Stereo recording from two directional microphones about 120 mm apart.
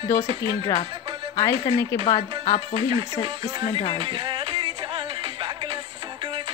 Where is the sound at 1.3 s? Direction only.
25° left (ahead or behind).